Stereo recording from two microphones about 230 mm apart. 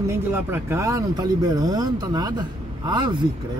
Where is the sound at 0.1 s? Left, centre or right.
Centre.